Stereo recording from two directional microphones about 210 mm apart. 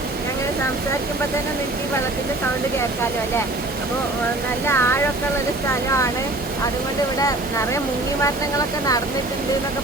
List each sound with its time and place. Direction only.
4.6 s speech: 10° left (ahead or behind)
7.2 s speech: 15° left (ahead or behind)